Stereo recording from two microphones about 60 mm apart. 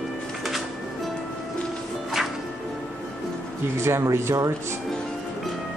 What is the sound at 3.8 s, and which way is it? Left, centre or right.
Speech, right.